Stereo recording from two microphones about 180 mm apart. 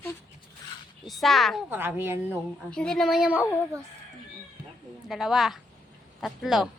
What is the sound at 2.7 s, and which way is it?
Speech, 5° left (ahead or behind).